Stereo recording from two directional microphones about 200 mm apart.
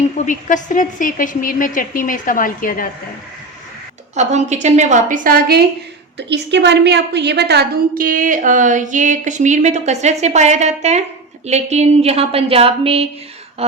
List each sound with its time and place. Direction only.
0.2 s a woman's voice: 40° left (ahead or behind)
4.1 s a woman's voice: 35° right (ahead or behind)